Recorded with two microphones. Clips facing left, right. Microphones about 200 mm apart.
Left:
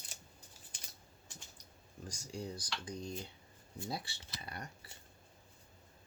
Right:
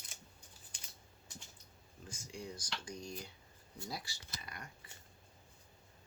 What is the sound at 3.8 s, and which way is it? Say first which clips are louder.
Speech: left 4 dB; 30° left (ahead or behind).